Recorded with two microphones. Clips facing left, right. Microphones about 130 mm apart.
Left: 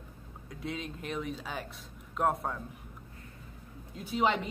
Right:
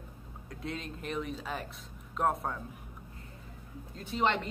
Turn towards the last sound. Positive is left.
turn(degrees=5)  # may be behind; listen again after turning